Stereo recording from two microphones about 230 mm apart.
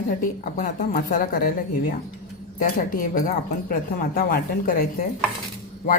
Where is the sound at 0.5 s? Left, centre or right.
Left.